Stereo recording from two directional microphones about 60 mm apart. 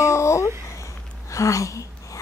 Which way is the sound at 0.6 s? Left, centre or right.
Left.